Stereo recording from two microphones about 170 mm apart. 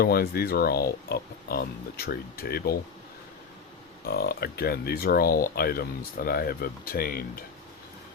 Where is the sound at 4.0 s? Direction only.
65° left (ahead or behind).